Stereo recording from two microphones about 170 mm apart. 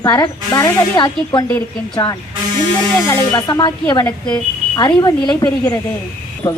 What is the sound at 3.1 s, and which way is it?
Speech, 25° left (ahead or behind).